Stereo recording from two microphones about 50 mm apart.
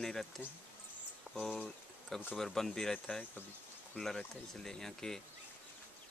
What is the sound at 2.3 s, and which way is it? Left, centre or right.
Speech, centre.